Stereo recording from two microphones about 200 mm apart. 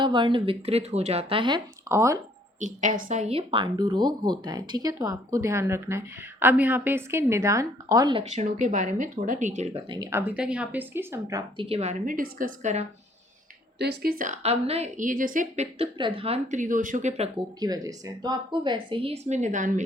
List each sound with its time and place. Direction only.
0.0 s speech: 25° right (ahead or behind)
2.6 s a woman's voice: 40° right (ahead or behind); by 8.2 s 20° right (ahead or behind)
8.3 s a woman's voice: 35° right (ahead or behind)
9.9 s speech: 15° right (ahead or behind); by 12.8 s 40° right (ahead or behind)
13.7 s a woman's voice: 55° right (ahead or behind); by 17.2 s 35° right (ahead or behind)
17.6 s speech: 20° right (ahead or behind); by 19.8 s 40° right (ahead or behind)